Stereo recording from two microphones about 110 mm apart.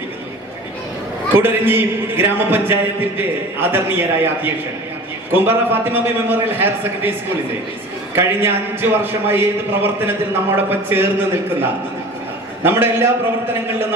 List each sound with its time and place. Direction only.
1.3 s a man's voice: 20° right (ahead or behind)
8.1 s a man's voice: 20° right (ahead or behind)
12.6 s a man's voice: 20° right (ahead or behind)